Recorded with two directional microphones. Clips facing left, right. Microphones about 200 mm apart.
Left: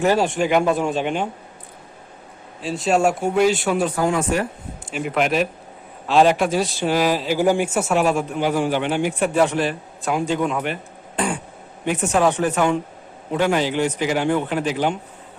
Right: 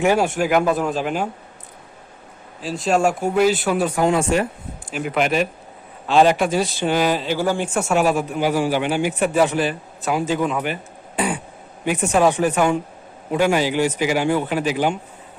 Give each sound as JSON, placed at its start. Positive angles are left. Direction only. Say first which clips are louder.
{"t": 0.0, "sound": "a man's voice", "louder": "even", "side_deg": -10}
{"t": 2.6, "sound": "a man's voice", "louder": "even", "side_deg": 0}
{"t": 4.0, "sound": "speech", "louder": "right 5 dB", "side_deg": -25}
{"t": 4.9, "sound": "a man's voice", "louder": "even", "side_deg": 0}
{"t": 7.3, "sound": "a man's voice", "louder": "left 3 dB", "side_deg": 15}
{"t": 11.9, "sound": "speech", "louder": "right 1 dB", "side_deg": -10}